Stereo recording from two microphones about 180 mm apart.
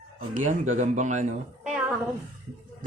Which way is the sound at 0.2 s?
45° right (ahead or behind).